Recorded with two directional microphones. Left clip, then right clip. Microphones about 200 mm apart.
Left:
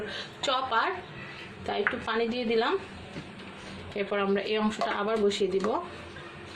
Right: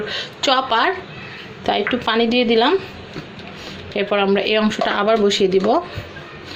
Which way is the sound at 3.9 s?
35° right (ahead or behind).